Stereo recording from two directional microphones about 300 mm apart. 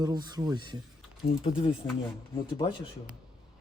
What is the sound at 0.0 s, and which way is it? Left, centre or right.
Speech, centre.